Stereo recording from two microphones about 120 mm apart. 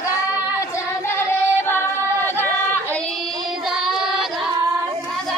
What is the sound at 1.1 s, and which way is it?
Female singing, 20° left (ahead or behind).